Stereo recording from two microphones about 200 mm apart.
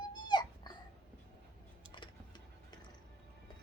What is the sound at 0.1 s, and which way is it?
Dog, 20° left (ahead or behind).